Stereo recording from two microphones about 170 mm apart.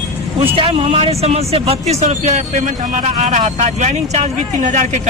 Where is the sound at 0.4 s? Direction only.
35° right (ahead or behind).